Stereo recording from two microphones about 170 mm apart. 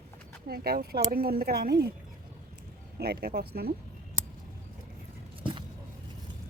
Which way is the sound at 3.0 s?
70° right (ahead or behind).